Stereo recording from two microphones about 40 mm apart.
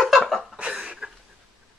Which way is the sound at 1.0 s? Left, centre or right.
Right.